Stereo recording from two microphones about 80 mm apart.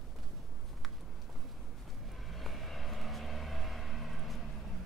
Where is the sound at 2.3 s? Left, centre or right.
Centre.